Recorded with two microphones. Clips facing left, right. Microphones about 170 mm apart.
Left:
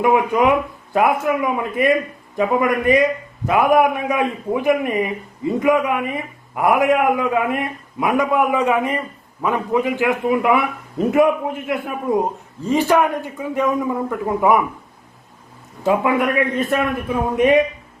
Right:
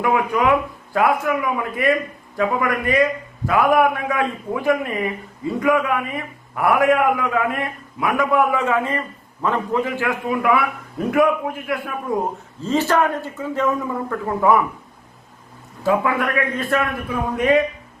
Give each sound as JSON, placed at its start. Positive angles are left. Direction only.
{"t": 0.0, "sound": "a man's voice", "side_deg": 20}
{"t": 15.8, "sound": "a man's voice", "side_deg": 20}